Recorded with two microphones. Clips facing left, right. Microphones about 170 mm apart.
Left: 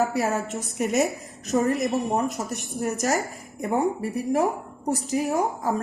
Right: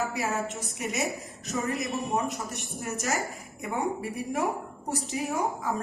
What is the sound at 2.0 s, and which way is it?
Speech, 40° left (ahead or behind).